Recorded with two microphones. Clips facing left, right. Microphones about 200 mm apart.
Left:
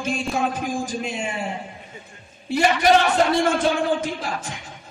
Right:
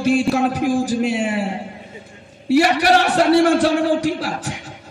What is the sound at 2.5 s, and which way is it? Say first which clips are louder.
Speech: right 3 dB; 75° right (ahead or behind).